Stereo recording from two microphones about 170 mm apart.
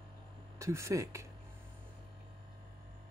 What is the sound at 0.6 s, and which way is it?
Speech, 15° right (ahead or behind).